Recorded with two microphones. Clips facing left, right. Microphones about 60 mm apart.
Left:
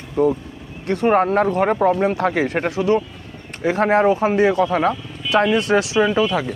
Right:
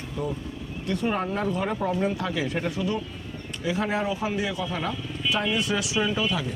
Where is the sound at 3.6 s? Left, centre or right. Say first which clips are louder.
Left 11 dB; left.